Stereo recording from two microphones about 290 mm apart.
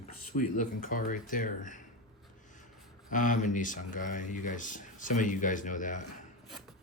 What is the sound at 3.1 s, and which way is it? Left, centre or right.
Speech, left.